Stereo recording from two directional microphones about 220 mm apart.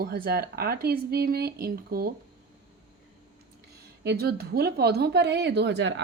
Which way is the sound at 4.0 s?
50° right (ahead or behind).